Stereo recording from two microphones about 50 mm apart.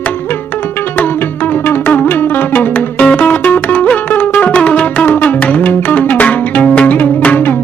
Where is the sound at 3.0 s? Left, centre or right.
Left.